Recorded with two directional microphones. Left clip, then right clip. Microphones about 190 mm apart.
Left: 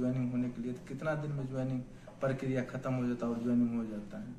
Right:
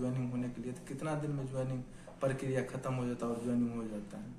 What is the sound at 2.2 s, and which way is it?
Speech, 15° right (ahead or behind).